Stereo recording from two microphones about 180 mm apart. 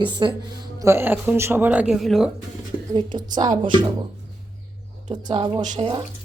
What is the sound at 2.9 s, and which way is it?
A woman's voice, 25° right (ahead or behind).